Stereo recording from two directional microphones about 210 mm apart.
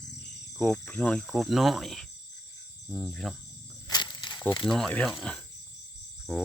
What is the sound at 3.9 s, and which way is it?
Wild animals, 20° left (ahead or behind).